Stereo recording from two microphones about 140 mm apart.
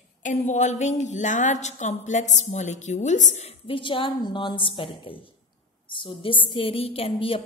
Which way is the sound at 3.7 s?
40° left (ahead or behind).